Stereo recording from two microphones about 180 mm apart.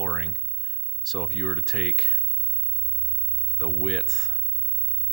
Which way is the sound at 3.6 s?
Centre (ahead or behind).